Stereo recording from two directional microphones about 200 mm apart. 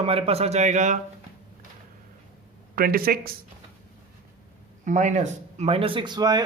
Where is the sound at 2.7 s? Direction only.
50° right (ahead or behind).